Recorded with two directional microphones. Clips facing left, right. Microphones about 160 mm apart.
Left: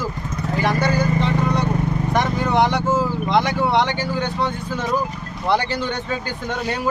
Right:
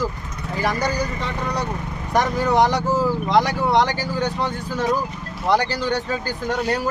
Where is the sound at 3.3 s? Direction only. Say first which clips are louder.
Even; 35° right (ahead or behind).